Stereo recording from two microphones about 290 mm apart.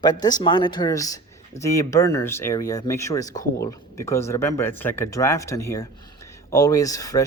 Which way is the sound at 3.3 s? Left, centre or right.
Left.